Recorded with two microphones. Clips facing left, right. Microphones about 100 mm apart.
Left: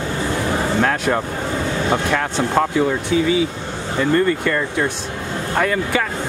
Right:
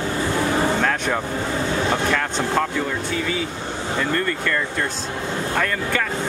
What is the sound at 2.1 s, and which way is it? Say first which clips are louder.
Speech: left 3 dB; 20° left (ahead or behind).